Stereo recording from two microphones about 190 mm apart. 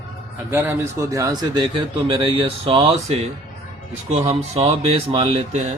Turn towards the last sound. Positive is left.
turn(degrees=-35)  # may be behind; listen again after turning